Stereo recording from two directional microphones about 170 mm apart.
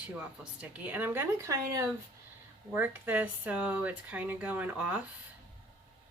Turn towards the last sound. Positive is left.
turn(degrees=-10)  # may be behind; listen again after turning